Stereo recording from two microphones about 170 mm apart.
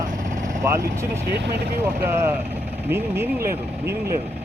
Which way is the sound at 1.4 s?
70° right (ahead or behind).